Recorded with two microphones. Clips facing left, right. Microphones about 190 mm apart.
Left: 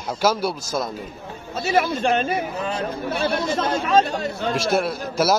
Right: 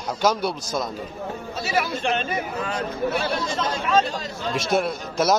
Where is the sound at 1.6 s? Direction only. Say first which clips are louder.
Left 5 dB; 45° left (ahead or behind).